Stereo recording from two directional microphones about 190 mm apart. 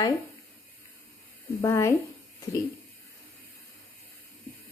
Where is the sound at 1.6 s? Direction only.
15° left (ahead or behind).